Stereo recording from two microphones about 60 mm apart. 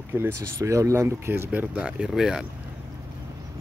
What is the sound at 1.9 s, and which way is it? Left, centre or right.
Speech, centre.